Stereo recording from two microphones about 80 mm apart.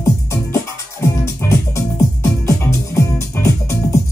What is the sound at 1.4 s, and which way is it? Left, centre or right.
Music, left.